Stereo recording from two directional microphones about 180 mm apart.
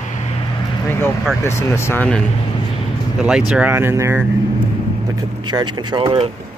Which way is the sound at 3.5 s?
10° right (ahead or behind).